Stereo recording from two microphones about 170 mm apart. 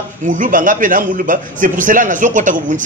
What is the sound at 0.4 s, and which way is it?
A man's voice, 50° right (ahead or behind).